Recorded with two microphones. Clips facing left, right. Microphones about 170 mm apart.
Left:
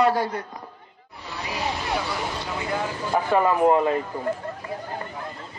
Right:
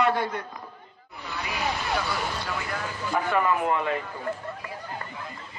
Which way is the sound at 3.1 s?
35° left (ahead or behind).